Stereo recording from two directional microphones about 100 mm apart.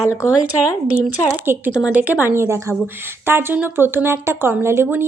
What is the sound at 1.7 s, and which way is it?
A woman's voice, 10° right (ahead or behind).